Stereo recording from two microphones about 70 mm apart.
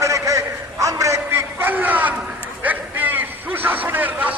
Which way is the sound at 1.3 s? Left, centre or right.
Right.